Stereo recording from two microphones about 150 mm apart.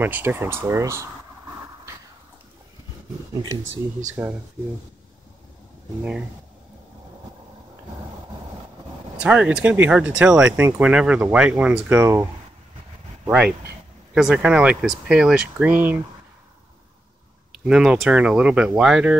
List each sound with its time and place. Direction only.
0.0 s speech: 15° right (ahead or behind)
4.1 s speech: 10° right (ahead or behind)
9.2 s speech: 5° right (ahead or behind)
17.6 s speech: 5° right (ahead or behind)